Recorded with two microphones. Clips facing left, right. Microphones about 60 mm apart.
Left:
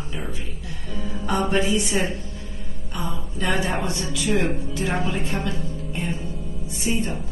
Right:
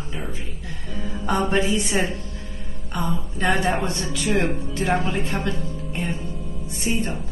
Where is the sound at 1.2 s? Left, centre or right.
Right.